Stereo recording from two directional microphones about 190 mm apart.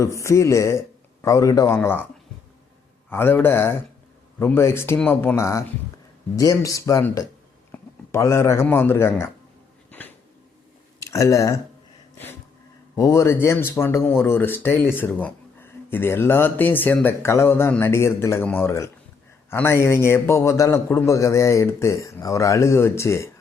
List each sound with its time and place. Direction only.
0.0 s speech: 15° left (ahead or behind)
3.1 s a man's voice: 10° left (ahead or behind)
11.0 s speech: 15° left (ahead or behind)
12.1 s a sound: 10° left (ahead or behind)
13.0 s speech: 15° left (ahead or behind)